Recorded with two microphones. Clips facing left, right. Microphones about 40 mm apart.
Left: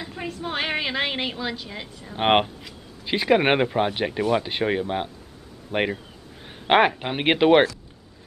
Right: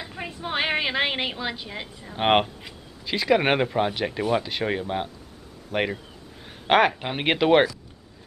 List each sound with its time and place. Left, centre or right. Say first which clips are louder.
0.0 s a sound: left 2 dB; centre
0.3 s a woman's voice: right 1 dB; centre
2.1 s speech: left 1 dB; centre